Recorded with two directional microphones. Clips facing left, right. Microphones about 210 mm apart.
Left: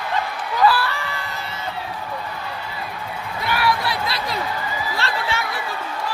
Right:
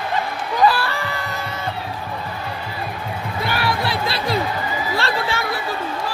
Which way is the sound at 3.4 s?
30° right (ahead or behind).